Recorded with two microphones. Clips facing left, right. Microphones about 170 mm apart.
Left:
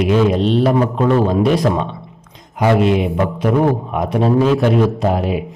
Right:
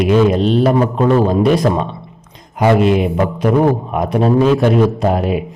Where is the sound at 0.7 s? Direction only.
30° right (ahead or behind).